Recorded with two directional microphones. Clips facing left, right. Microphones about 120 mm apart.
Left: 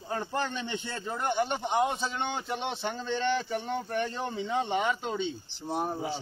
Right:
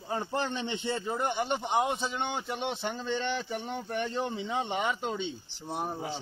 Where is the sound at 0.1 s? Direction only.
25° right (ahead or behind).